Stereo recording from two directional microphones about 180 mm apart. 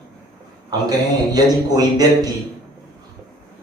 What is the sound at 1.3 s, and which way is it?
Speech, 20° right (ahead or behind).